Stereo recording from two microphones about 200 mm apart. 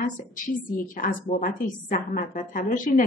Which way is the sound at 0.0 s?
40° left (ahead or behind).